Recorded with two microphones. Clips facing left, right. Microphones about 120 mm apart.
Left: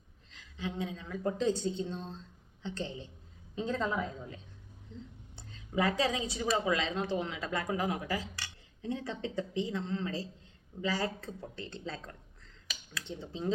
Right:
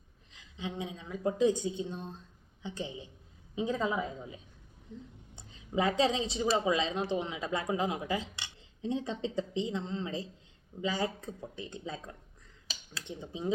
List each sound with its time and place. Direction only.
0.3 s a woman's voice: 20° right (ahead or behind)
5.4 s a woman's voice: 20° right (ahead or behind)